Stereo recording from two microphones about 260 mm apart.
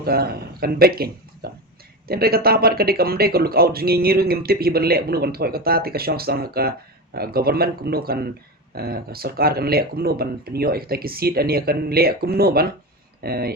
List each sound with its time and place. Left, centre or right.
0.0 s speech: right